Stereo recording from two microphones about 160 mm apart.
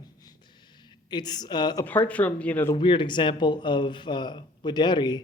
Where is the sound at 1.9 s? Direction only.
10° left (ahead or behind).